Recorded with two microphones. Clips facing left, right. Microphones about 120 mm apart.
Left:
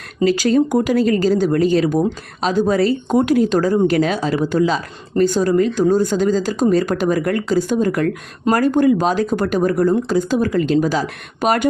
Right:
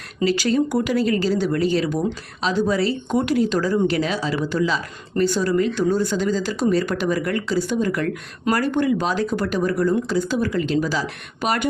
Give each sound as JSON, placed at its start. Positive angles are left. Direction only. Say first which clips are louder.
{"t": 0.3, "sound": "speech", "louder": "left 4 dB", "side_deg": 45}